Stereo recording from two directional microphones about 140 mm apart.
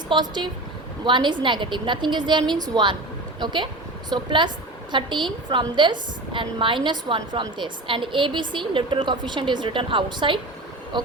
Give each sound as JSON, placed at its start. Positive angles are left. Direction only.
{"t": 0.1, "sound": "a woman's voice", "side_deg": -30}